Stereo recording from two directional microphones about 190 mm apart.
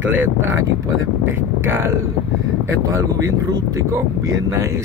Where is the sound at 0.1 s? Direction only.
90° right.